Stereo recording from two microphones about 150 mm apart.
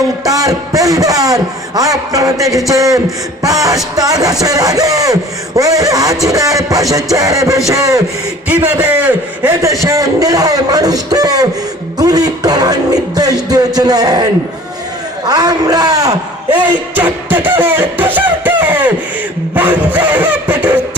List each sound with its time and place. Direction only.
0.3 s a man's voice: 25° right (ahead or behind)
8.4 s a sound: 10° right (ahead or behind)
9.6 s a man's voice: 20° right (ahead or behind)
11.9 s music: 25° right (ahead or behind)
13.7 s a man's voice: 25° right (ahead or behind)
15.3 s a man's voice: 25° right (ahead or behind)
16.6 s music: 10° right (ahead or behind)
19.5 s a sound: 10° right (ahead or behind)